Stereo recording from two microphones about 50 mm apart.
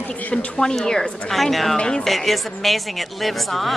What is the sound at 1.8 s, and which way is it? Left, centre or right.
Speech, left.